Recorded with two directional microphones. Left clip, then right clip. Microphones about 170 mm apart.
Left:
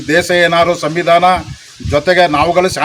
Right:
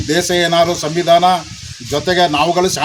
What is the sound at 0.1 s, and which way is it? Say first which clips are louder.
A man's voice: left 4 dB; centre (ahead or behind).